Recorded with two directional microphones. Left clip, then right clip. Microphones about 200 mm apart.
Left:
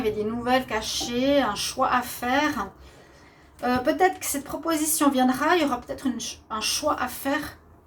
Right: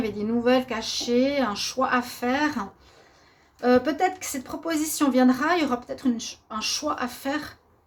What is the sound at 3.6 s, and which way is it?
A woman's voice, 40° right (ahead or behind).